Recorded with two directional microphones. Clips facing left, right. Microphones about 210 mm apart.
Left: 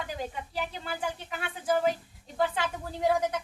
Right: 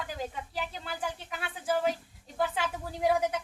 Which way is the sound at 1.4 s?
Centre (ahead or behind).